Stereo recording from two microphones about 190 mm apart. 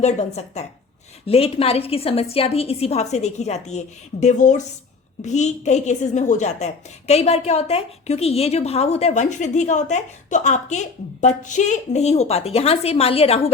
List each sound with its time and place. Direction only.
0.0 s a woman's voice: 35° left (ahead or behind)